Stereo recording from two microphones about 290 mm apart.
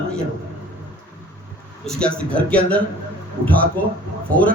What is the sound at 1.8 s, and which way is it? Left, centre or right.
A man's voice, centre.